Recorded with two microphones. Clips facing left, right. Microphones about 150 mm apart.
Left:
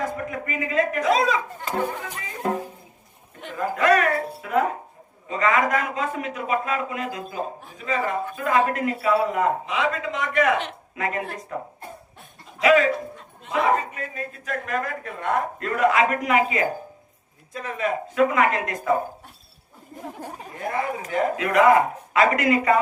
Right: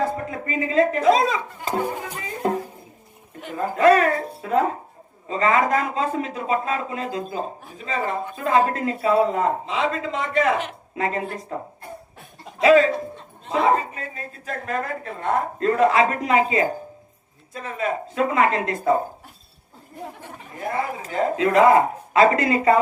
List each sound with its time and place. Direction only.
0.0 s a man's voice: 30° right (ahead or behind)
3.5 s a man's voice: 30° right (ahead or behind)
12.5 s a man's voice: 30° right (ahead or behind)
20.7 s a man's voice: 30° right (ahead or behind)